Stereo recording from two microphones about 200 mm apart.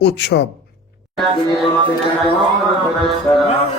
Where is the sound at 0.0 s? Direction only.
55° left (ahead or behind).